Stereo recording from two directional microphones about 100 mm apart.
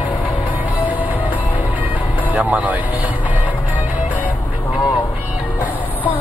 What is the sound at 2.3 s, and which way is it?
Speech, 15° right (ahead or behind).